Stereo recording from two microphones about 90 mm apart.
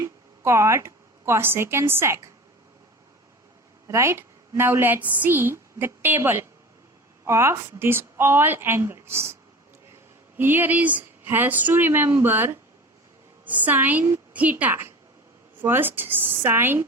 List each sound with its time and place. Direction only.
0.0 s a woman's voice: 30° right (ahead or behind)
3.8 s a woman's voice: 30° right (ahead or behind)
10.3 s a woman's voice: 20° right (ahead or behind)